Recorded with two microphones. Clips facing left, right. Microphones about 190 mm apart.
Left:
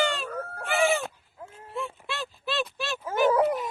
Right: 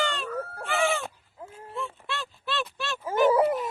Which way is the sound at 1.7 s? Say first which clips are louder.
Left 1 dB; 5° left (ahead or behind).